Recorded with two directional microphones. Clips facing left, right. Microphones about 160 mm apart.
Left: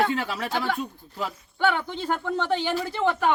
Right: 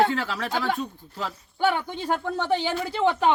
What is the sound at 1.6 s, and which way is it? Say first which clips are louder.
Speech: even; 10° right (ahead or behind).